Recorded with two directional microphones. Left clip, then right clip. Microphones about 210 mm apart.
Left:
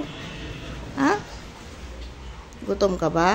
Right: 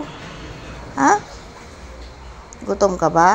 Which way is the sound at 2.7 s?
15° left (ahead or behind).